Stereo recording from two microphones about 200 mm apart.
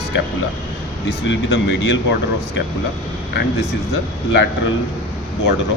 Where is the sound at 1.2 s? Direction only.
65° left (ahead or behind).